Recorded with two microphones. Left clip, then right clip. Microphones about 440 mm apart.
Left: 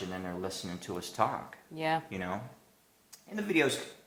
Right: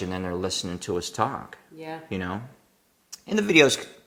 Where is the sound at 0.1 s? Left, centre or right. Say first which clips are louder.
Right 9 dB; right.